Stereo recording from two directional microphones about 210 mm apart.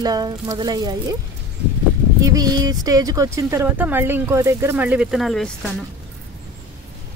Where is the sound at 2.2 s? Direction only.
15° right (ahead or behind); by 5.7 s centre (ahead or behind).